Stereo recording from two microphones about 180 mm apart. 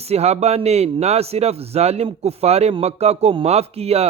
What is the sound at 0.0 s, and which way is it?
Speech, 35° right (ahead or behind).